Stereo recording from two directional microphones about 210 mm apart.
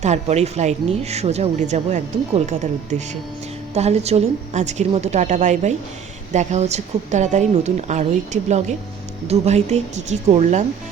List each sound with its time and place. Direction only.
0.0 s a woman's voice: 30° right (ahead or behind)
3.8 s a woman's voice: 30° right (ahead or behind)